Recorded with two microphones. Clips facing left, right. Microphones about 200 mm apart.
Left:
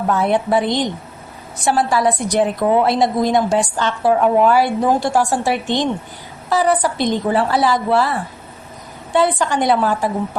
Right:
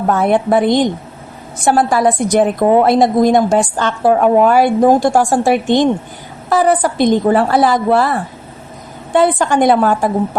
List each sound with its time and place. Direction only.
0.1 s a woman's voice: 50° right (ahead or behind)
9.1 s a woman's voice: 50° right (ahead or behind)